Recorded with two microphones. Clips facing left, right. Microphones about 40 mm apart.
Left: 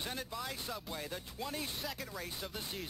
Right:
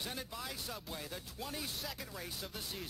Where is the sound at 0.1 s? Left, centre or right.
Centre.